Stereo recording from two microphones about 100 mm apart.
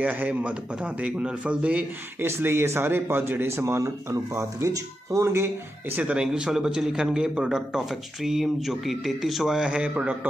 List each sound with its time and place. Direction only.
0.0 s speech: 15° right (ahead or behind)
2.2 s speech: 25° right (ahead or behind); by 10.1 s 10° right (ahead or behind)